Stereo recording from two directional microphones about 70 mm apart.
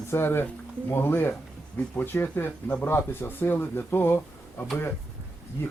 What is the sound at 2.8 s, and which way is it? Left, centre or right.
Speech, left.